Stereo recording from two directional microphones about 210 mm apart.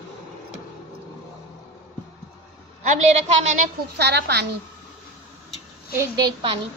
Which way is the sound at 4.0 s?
50° right (ahead or behind).